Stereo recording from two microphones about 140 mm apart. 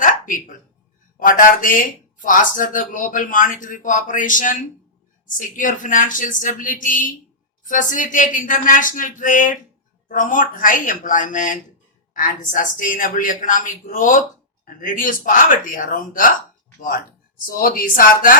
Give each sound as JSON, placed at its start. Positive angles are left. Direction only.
{"t": 0.0, "sound": "a sound", "side_deg": 70}
{"t": 1.2, "sound": "speech", "side_deg": 75}
{"t": 12.1, "sound": "speech", "side_deg": 75}
{"t": 17.6, "sound": "speech", "side_deg": 85}